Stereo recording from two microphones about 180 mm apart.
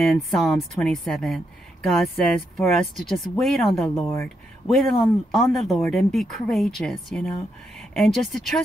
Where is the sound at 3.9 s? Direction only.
15° left (ahead or behind).